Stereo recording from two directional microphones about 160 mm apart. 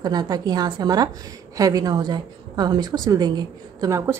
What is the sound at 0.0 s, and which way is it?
A woman's voice, 25° right (ahead or behind).